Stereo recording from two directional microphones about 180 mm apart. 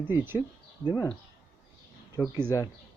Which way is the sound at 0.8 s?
20° left (ahead or behind).